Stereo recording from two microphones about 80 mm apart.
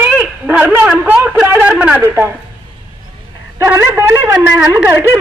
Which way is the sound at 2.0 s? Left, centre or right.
Right.